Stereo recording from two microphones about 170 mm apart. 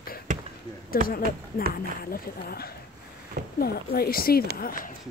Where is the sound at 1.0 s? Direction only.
55° left (ahead or behind).